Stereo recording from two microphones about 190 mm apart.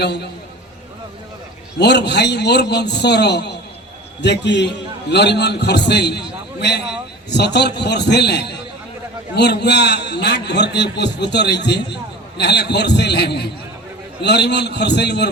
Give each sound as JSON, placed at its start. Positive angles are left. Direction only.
{"t": 0.0, "sound": "a man's voice", "side_deg": 60}
{"t": 1.8, "sound": "a man's voice", "side_deg": 65}